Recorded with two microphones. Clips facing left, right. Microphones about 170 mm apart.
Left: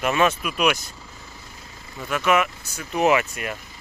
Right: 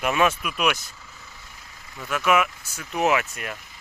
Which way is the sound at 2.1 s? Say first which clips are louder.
Left 1 dB; 5° right (ahead or behind).